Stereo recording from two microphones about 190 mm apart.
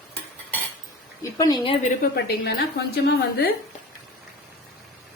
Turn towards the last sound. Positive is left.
turn(degrees=55)  # may be behind; listen again after turning